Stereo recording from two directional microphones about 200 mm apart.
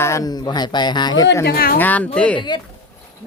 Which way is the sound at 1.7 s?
10° left (ahead or behind).